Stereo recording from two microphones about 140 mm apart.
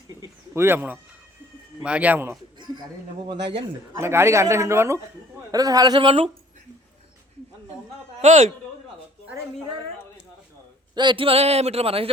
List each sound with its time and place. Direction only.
0.1 s bird: 20° right (ahead or behind)
1.8 s speech: 10° right (ahead or behind)
2.6 s a sound: 30° right (ahead or behind)
3.9 s a man's voice: 20° right (ahead or behind); by 6.3 s 40° right (ahead or behind)
8.2 s a man's voice: 60° right (ahead or behind)
10.9 s speech: 35° right (ahead or behind)